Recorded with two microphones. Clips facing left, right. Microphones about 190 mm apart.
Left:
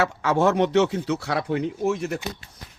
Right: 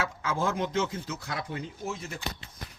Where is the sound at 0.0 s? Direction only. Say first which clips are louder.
Left 9 dB; 70° left (ahead or behind).